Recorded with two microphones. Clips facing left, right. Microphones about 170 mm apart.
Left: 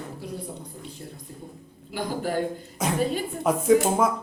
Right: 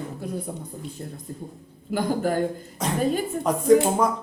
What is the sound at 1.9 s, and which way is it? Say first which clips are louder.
Speech: right 4 dB; 45° right (ahead or behind).